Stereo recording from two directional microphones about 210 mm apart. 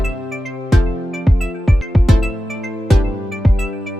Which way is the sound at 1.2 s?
Centre (ahead or behind).